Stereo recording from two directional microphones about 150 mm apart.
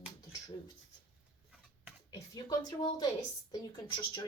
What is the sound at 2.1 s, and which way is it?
A woman's voice, 25° left (ahead or behind).